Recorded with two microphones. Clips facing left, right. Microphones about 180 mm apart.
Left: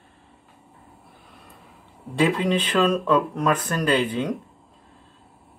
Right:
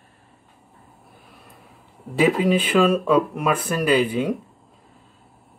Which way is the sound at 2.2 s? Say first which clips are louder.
Right 3 dB; 5° right (ahead or behind).